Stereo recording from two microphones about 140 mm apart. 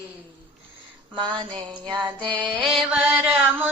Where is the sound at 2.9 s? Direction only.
10° right (ahead or behind).